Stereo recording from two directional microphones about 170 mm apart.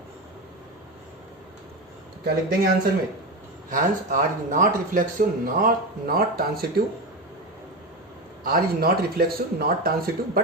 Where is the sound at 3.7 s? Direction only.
50° right (ahead or behind).